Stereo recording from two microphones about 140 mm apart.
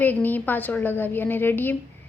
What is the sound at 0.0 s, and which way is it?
A woman's voice, 15° left (ahead or behind).